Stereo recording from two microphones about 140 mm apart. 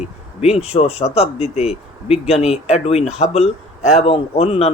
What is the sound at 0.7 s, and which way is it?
Speech, 45° left (ahead or behind).